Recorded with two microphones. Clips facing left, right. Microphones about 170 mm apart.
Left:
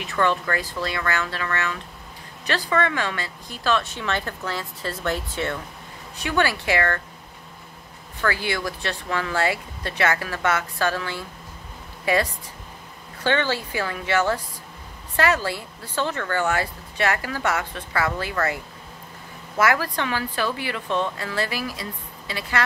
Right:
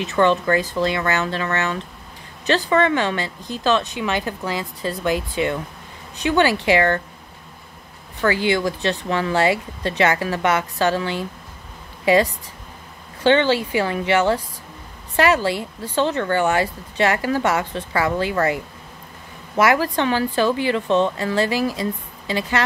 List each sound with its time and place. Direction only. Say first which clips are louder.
0.0 s speech: right 5 dB; 20° right (ahead or behind)
8.2 s a woman's voice: right 6 dB; 20° right (ahead or behind)